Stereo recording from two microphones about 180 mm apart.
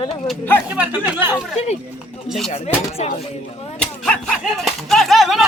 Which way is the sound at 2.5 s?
35° left (ahead or behind).